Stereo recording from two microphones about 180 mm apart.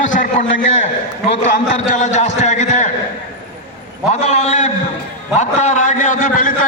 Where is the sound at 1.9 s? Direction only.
40° left (ahead or behind).